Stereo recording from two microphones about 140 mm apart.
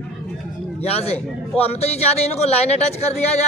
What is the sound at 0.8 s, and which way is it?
Speech, 50° left (ahead or behind).